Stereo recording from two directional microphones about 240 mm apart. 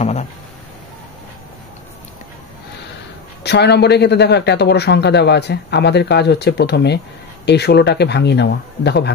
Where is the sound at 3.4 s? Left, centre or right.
Left.